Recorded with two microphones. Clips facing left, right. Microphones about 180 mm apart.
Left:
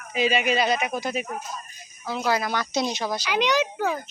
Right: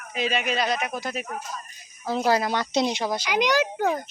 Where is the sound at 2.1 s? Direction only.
35° right (ahead or behind).